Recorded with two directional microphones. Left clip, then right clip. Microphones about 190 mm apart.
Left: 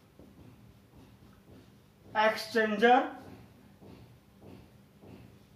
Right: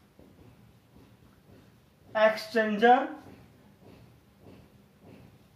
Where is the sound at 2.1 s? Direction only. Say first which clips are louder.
Right 3 dB; 20° right (ahead or behind).